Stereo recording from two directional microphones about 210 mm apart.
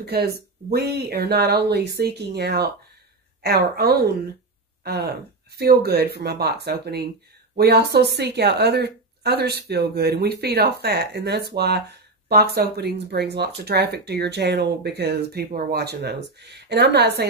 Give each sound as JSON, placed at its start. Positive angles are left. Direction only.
{"t": 0.0, "sound": "speech", "side_deg": -50}